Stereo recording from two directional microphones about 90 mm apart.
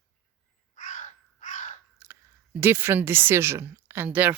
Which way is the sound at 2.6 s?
25° right (ahead or behind).